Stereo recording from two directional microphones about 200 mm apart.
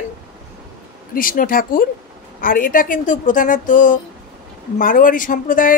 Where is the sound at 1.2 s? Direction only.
45° left (ahead or behind).